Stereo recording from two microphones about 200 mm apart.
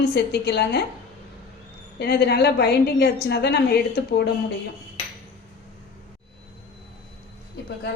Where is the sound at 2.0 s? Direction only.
55° left (ahead or behind).